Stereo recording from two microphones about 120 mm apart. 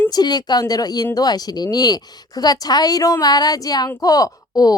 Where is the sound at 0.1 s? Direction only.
35° left (ahead or behind).